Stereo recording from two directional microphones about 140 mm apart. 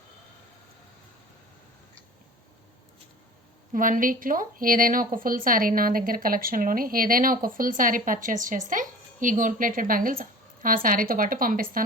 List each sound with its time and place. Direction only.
3.7 s speech: 75° right (ahead or behind)